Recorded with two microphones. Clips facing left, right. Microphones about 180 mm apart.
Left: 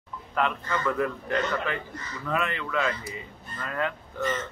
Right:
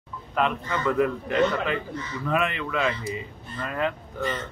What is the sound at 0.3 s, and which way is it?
Speech, 20° right (ahead or behind).